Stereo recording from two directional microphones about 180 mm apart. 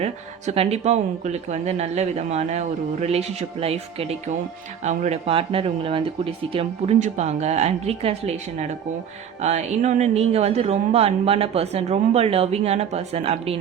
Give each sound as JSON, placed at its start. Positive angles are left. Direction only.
{"t": 0.0, "sound": "speech", "side_deg": -35}